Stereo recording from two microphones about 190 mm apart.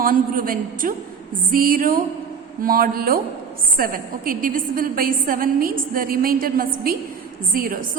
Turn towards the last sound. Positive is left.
turn(degrees=-50)  # may be behind; listen again after turning